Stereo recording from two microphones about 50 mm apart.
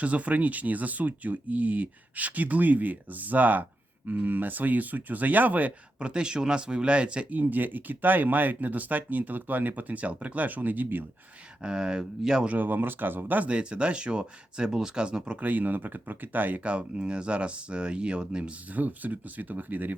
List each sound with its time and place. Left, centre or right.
0.0 s speech: right
6.0 s speech: centre
7.3 s speech: right
11.6 s speech: centre
12.5 s speech: right
13.5 s speech: right
15.4 s speech: right
18.7 s speech: right